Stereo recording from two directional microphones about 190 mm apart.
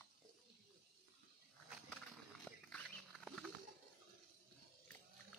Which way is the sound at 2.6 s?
5° left (ahead or behind).